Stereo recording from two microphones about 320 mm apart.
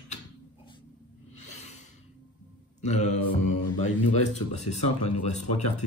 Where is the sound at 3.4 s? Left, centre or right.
Left.